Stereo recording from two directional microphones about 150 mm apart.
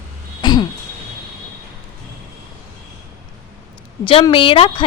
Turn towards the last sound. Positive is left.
turn(degrees=35)  # may be behind; listen again after turning